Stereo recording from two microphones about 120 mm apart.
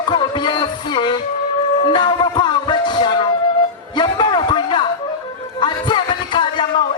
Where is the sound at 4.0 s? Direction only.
40° left (ahead or behind).